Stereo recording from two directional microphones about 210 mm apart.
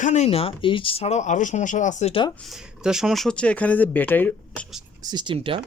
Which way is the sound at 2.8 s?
5° right (ahead or behind).